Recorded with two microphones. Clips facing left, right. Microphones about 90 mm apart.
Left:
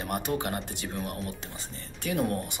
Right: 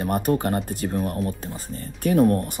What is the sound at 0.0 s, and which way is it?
Speech, 40° right (ahead or behind).